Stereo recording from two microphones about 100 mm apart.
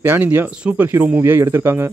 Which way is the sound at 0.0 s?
20° right (ahead or behind).